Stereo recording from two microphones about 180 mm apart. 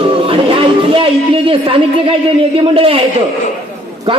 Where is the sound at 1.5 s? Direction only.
30° right (ahead or behind).